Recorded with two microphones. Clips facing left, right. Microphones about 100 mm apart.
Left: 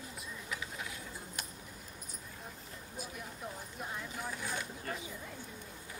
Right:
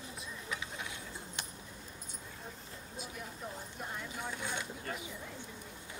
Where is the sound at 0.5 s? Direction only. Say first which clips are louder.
Even; 25° right (ahead or behind).